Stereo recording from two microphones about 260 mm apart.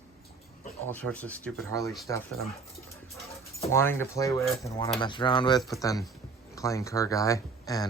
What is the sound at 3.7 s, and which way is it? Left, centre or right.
Speech, centre.